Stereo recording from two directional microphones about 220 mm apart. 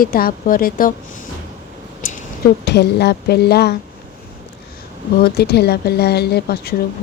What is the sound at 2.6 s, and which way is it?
A woman's voice, 50° left (ahead or behind).